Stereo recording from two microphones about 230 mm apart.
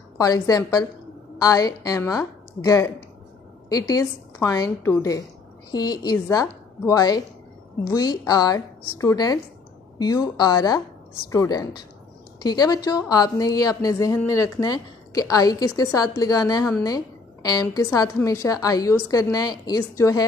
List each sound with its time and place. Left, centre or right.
0.2 s a woman's voice: centre